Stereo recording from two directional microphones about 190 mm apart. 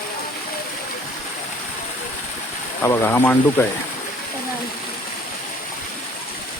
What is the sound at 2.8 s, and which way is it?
Speech, 15° left (ahead or behind).